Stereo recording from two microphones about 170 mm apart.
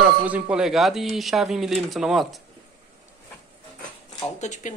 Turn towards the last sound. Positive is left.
turn(degrees=45)  # may be behind; listen again after turning